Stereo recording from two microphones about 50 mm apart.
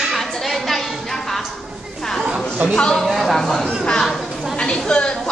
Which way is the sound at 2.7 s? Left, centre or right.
Centre.